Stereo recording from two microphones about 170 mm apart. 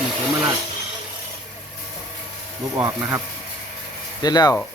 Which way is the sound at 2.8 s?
10° right (ahead or behind).